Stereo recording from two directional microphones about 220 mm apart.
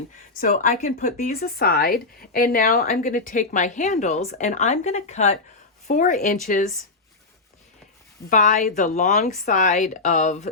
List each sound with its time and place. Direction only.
0.3 s speech: 40° left (ahead or behind)
8.3 s speech: 35° left (ahead or behind)